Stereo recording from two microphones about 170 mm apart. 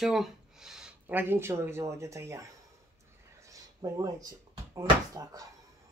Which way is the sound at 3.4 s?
20° right (ahead or behind).